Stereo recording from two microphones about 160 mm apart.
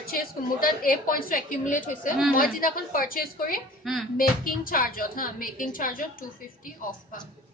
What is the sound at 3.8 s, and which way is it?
Music, centre (ahead or behind).